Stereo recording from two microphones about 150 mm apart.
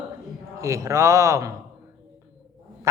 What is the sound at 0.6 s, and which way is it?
Speech, 20° right (ahead or behind).